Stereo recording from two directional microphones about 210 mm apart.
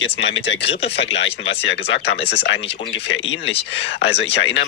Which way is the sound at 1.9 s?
55° left (ahead or behind).